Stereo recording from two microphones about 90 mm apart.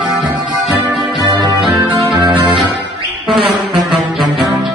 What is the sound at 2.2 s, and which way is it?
Music, 55° right (ahead or behind).